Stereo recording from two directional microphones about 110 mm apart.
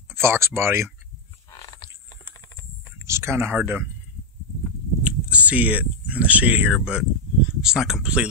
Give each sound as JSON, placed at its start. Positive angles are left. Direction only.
{"t": 0.1, "sound": "speech", "side_deg": -25}
{"t": 3.1, "sound": "speech", "side_deg": -25}
{"t": 5.0, "sound": "a sound", "side_deg": -10}
{"t": 6.7, "sound": "speech", "side_deg": -5}